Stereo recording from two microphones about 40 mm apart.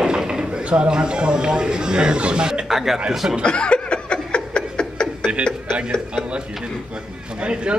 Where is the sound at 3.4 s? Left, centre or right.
Left.